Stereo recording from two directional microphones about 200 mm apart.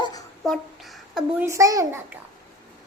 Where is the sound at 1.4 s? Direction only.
15° right (ahead or behind).